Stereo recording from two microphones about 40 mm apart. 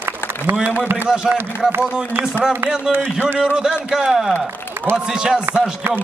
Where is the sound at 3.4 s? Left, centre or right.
Centre.